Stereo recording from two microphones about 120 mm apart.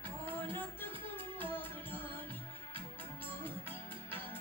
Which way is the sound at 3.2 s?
15° left (ahead or behind).